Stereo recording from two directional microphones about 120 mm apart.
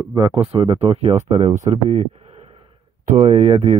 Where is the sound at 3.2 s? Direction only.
55° right (ahead or behind).